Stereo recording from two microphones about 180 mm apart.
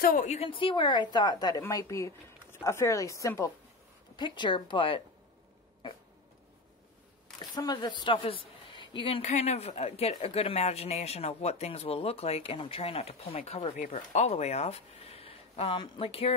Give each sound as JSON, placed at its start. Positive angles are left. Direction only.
{"t": 0.0, "sound": "a woman's voice", "side_deg": 45}
{"t": 7.3, "sound": "a woman's voice", "side_deg": 25}